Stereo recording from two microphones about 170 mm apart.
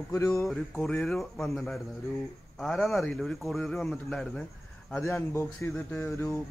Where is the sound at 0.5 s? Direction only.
5° left (ahead or behind).